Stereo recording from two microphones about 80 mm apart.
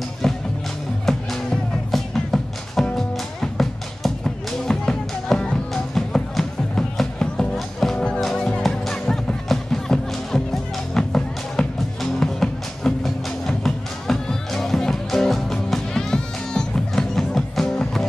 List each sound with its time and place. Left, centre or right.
0.2 s music: centre